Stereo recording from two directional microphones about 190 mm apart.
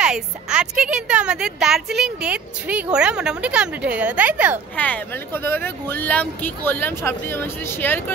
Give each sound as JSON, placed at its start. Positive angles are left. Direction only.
{"t": 0.0, "sound": "a woman's voice", "side_deg": -5}
{"t": 4.7, "sound": "speech", "side_deg": 10}